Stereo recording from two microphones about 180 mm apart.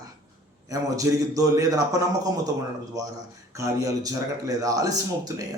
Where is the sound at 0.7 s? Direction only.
20° right (ahead or behind).